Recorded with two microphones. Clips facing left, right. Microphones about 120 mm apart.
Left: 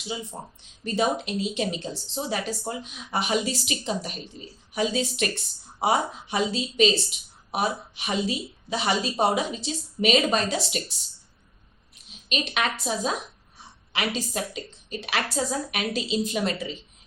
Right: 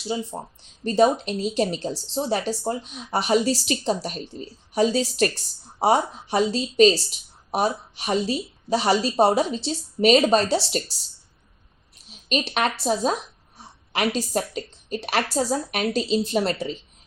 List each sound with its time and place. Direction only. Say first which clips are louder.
0.0 s a woman's voice: right 6 dB; 35° right (ahead or behind)
12.3 s a woman's voice: right 4 dB; 40° right (ahead or behind)